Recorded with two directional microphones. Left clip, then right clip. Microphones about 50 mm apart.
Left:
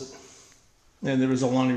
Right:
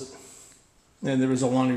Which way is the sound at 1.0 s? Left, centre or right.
Centre.